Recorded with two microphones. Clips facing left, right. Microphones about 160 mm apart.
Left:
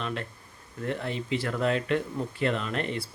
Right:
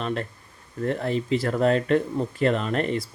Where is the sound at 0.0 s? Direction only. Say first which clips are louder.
Right 5 dB; 40° right (ahead or behind).